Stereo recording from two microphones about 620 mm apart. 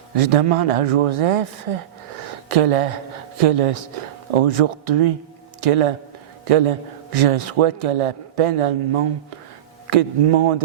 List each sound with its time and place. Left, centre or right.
0.2 s speech: right